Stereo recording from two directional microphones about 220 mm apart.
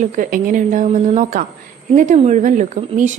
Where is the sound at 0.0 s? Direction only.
35° right (ahead or behind).